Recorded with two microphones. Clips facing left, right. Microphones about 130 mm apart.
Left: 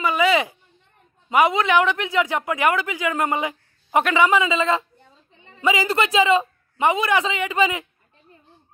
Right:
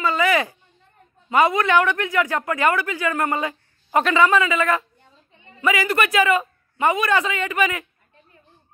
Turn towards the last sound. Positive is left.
turn(degrees=20)  # may be behind; listen again after turning